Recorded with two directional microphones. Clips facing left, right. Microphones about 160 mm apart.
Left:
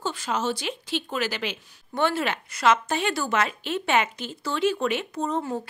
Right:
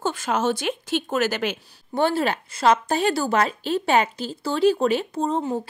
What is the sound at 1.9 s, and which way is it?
A woman's voice, 35° right (ahead or behind).